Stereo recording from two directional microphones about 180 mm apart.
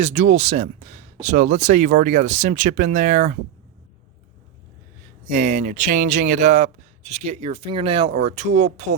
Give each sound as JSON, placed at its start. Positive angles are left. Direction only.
{"t": 0.0, "sound": "speech", "side_deg": -40}
{"t": 5.3, "sound": "speech", "side_deg": -40}